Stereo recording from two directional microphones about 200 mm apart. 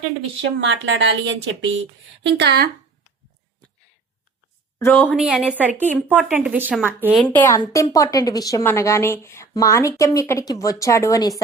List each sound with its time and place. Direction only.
0.6 s speech: 65° right (ahead or behind)
4.9 s speech: centre (ahead or behind)
7.2 s a woman's voice: 10° left (ahead or behind)